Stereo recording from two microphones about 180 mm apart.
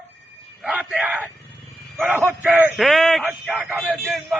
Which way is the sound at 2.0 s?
10° right (ahead or behind).